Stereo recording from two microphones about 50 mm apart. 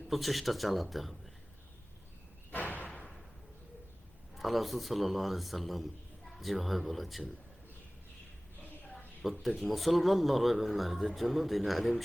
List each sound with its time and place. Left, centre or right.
0.1 s a man's voice: centre
2.5 s slam: left
4.4 s a man's voice: centre
9.2 s a man's voice: centre